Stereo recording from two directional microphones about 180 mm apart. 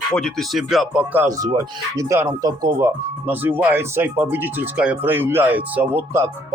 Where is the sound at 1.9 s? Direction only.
15° right (ahead or behind).